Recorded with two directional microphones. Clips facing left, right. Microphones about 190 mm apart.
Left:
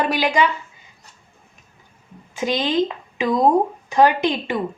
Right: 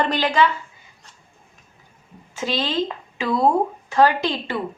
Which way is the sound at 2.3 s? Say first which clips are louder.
Left 3 dB; 15° left (ahead or behind).